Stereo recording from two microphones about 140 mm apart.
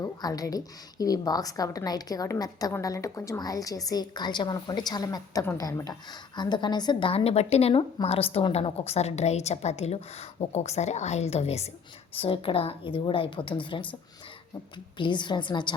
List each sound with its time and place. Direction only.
0.0 s a woman's voice: 25° left (ahead or behind)
14.9 s a woman's voice: 35° left (ahead or behind)